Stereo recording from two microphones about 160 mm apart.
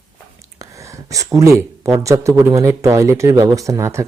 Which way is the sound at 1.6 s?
20° right (ahead or behind).